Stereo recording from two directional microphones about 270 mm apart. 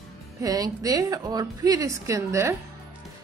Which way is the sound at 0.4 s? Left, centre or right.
Centre.